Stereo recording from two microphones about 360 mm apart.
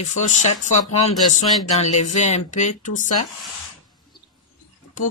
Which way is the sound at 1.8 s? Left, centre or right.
Centre.